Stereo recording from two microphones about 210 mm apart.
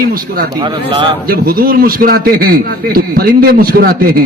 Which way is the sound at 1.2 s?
45° right (ahead or behind).